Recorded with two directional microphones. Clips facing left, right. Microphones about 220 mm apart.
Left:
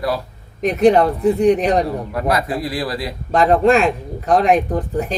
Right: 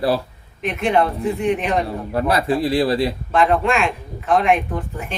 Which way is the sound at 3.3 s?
40° left (ahead or behind).